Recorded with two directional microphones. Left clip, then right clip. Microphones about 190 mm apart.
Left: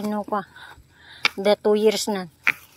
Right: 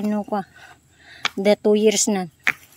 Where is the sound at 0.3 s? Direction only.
30° right (ahead or behind).